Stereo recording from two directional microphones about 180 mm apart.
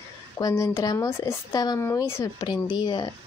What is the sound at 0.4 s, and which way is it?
Speech, 20° left (ahead or behind).